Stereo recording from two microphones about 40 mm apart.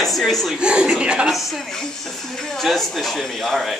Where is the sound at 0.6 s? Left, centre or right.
Right.